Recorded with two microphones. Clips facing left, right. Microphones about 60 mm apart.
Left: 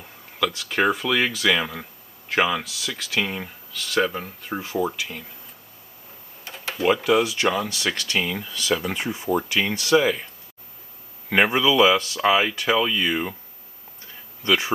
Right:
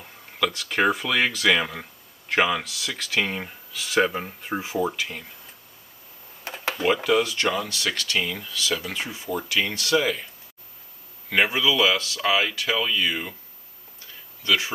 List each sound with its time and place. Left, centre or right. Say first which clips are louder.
0.0 s speech: left 1 dB; centre
4.7 s speech: left 2 dB; centre
6.7 s speech: left 2 dB; centre
11.5 s speech: left 4 dB; left
14.4 s speech: left 2 dB; left